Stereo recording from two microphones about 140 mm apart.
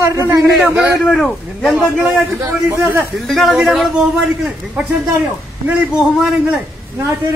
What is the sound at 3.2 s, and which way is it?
A man's voice, centre (ahead or behind).